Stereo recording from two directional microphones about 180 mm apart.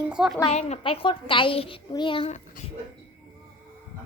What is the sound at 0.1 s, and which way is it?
Speech, 5° right (ahead or behind).